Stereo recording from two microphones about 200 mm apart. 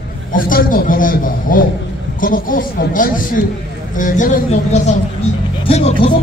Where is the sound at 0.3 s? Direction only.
45° left (ahead or behind).